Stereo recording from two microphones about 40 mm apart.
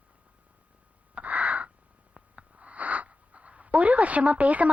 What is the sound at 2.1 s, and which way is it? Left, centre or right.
A woman's voice, right.